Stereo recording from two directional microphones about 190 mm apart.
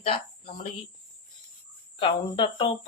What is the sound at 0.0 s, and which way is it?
Speech, 30° left (ahead or behind).